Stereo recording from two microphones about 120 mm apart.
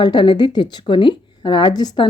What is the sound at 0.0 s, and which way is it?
A woman's voice, 40° left (ahead or behind).